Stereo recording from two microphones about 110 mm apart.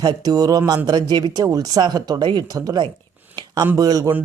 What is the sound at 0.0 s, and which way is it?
Speech, 40° right (ahead or behind).